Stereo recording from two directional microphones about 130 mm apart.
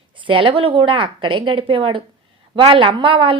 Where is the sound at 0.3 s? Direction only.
40° right (ahead or behind).